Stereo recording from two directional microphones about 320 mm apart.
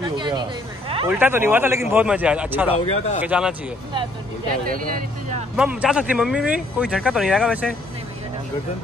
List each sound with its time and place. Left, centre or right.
0.0 s speech: centre
2.7 s speech: centre
3.2 s speech: centre
5.6 s speech: centre